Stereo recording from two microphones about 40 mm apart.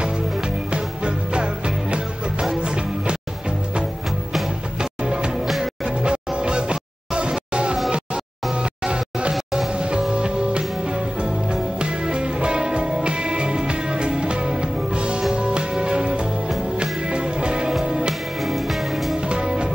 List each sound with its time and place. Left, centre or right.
0.7 s music: right
5.0 s music: right
9.3 s music: centre
9.7 s music: right
18.4 s music: centre
19.1 s music: right